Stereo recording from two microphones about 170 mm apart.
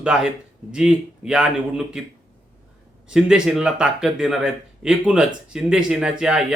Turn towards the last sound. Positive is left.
turn(degrees=-5)  # may be behind; listen again after turning